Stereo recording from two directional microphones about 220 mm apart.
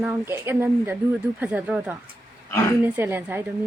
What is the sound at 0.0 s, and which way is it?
A woman's voice, 10° right (ahead or behind).